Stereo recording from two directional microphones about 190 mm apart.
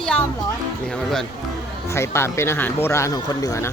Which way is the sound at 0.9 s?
Centre (ahead or behind).